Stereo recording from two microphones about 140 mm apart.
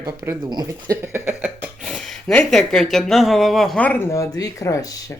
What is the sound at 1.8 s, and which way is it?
Speech, centre (ahead or behind).